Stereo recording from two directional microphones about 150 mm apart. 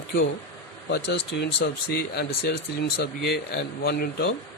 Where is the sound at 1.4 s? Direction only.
90° left.